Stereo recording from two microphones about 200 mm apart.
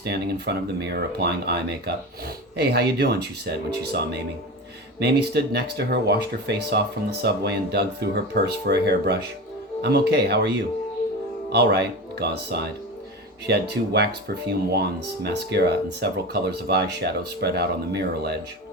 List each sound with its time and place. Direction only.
0.0 s speech: 55° right (ahead or behind)
4.9 s speech: 55° right (ahead or behind)
11.5 s speech: 55° right (ahead or behind)